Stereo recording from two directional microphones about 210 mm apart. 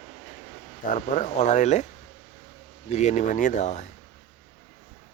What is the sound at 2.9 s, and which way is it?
Speech, 35° left (ahead or behind).